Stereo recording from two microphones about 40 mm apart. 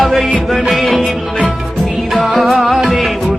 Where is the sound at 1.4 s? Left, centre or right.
Centre.